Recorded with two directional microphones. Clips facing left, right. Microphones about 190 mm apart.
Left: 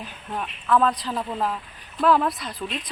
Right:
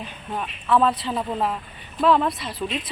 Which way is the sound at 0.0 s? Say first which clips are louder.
Right 1 dB; centre (ahead or behind).